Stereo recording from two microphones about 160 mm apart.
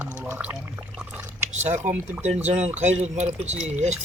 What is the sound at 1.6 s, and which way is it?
Speech, 50° right (ahead or behind).